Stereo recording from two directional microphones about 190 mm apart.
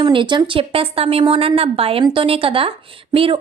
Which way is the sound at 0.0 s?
25° right (ahead or behind).